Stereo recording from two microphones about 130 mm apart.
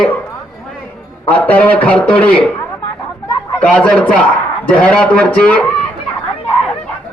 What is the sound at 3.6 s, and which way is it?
A man's voice, 10° left (ahead or behind).